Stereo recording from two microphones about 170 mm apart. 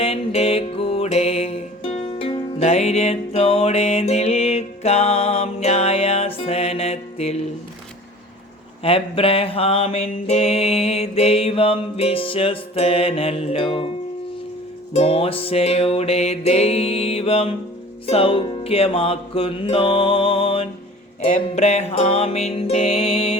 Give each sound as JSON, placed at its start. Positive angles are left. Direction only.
{"t": 0.0, "sound": "music", "side_deg": 35}
{"t": 8.8, "sound": "music", "side_deg": 35}
{"t": 14.9, "sound": "music", "side_deg": 35}